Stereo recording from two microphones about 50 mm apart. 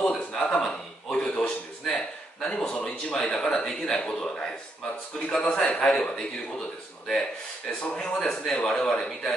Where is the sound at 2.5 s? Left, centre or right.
Centre.